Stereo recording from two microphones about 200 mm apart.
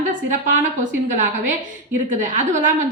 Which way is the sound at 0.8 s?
40° right (ahead or behind).